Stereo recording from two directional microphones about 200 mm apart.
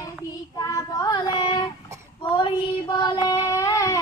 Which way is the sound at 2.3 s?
25° left (ahead or behind).